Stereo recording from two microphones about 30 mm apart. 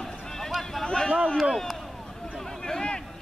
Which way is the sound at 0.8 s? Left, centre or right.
Left.